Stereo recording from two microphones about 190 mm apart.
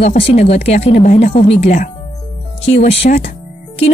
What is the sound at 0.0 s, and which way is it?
Speech, 35° left (ahead or behind).